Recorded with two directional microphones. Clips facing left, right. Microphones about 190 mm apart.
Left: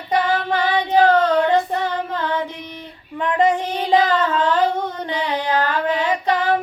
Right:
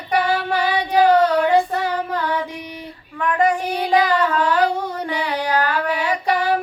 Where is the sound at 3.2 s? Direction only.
20° left (ahead or behind).